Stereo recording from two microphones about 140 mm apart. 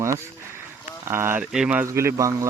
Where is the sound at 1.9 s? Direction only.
20° right (ahead or behind).